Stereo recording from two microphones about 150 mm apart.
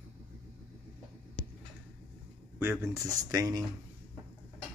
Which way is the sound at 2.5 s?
20° right (ahead or behind).